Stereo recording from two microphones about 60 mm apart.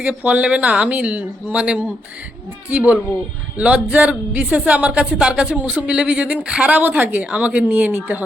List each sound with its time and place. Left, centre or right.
0.0 s speech: right